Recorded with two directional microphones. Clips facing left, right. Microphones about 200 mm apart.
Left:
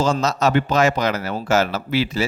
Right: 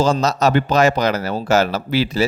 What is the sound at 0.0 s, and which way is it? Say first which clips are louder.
Speech: right 3 dB; 35° right (ahead or behind).